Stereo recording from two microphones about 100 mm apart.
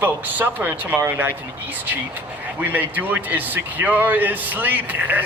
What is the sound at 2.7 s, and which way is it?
Speech, 20° right (ahead or behind).